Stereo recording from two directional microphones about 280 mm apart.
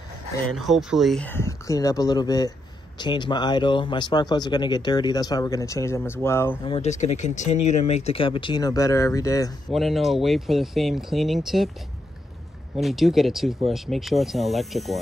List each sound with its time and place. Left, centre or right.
0.6 s speech: centre
6.7 s speech: left
9.7 s speech: centre
12.7 s speech: centre